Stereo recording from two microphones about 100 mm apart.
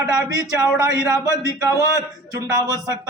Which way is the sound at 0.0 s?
30° right (ahead or behind).